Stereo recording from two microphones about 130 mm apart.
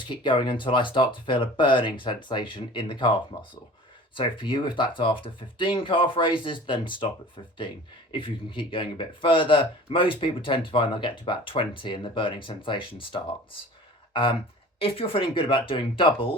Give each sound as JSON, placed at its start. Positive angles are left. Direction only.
{"t": 0.0, "sound": "speech", "side_deg": 40}
{"t": 4.1, "sound": "speech", "side_deg": 40}
{"t": 8.1, "sound": "speech", "side_deg": 40}